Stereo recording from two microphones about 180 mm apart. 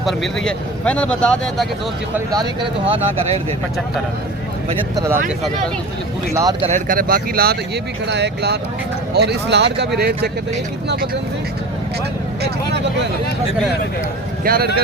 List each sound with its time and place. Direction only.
0.0 s speech: centre (ahead or behind)
2.3 s speech: 25° right (ahead or behind)
4.9 s speech: 15° right (ahead or behind)
6.3 s speech: 20° right (ahead or behind)
6.7 s speech: 45° right (ahead or behind)
8.0 s speech: 70° right (ahead or behind)
14.4 s speech: 55° right (ahead or behind)